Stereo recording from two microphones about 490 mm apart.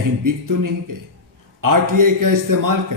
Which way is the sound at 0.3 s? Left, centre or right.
Right.